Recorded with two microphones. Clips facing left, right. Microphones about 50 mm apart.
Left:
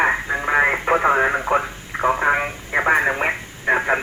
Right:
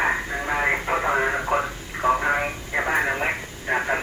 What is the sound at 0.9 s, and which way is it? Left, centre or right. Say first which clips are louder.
Radio: left 6 dB; left.